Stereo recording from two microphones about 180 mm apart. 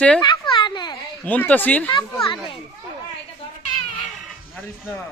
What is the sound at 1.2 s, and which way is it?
Speech, 10° left (ahead or behind).